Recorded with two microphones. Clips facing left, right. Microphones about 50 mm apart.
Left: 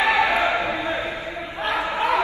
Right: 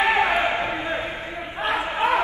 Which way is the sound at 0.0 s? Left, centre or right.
Right.